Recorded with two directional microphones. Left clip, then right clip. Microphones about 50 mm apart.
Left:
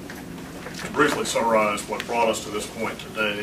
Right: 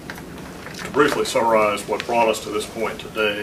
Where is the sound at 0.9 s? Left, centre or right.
Right.